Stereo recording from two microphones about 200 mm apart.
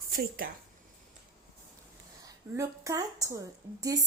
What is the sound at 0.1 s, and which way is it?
Speech, 45° right (ahead or behind).